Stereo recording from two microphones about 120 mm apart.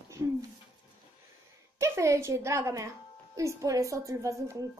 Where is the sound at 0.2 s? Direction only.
25° right (ahead or behind).